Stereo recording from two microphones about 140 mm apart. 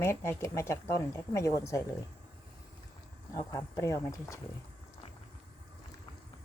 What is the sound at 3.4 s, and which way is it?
Speech, 20° left (ahead or behind).